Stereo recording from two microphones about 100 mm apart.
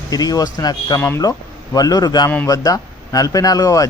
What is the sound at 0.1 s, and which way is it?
Speech, 40° left (ahead or behind).